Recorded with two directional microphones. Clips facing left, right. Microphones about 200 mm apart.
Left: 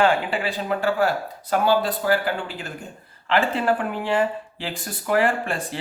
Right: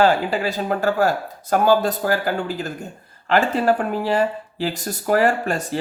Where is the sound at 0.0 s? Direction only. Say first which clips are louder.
Right 3 dB; 40° right (ahead or behind).